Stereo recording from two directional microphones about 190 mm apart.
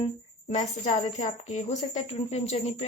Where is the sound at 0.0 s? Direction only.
35° left (ahead or behind).